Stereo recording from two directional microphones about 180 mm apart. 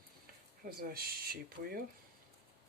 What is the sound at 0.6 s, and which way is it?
Speech, 55° right (ahead or behind).